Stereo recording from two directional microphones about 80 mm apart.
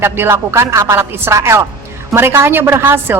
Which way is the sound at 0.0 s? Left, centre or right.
Right.